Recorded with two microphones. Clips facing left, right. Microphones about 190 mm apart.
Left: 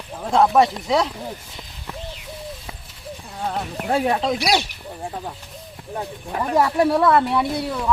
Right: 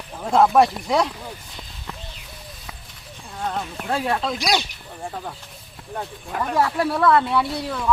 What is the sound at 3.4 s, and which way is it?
Speech, 10° left (ahead or behind).